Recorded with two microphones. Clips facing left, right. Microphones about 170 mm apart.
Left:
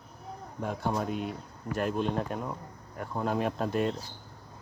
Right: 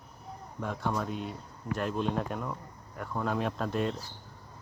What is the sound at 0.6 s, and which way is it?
Speech, 40° left (ahead or behind).